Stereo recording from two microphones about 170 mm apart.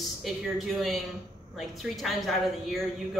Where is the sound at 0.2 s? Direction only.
Centre (ahead or behind).